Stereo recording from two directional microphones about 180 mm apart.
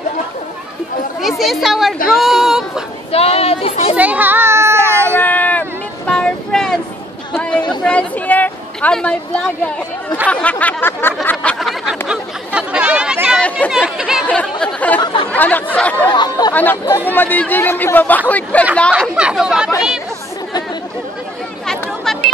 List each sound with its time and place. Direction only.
1.2 s speech: centre (ahead or behind)
3.1 s speech: 35° left (ahead or behind)
3.9 s a child's voice: 10° right (ahead or behind)
5.1 s vehicle: 10° left (ahead or behind)
7.3 s a sound: 5° left (ahead or behind)
13.4 s speech: centre (ahead or behind)
16.1 s speech: 25° left (ahead or behind)
18.9 s speech: 5° right (ahead or behind)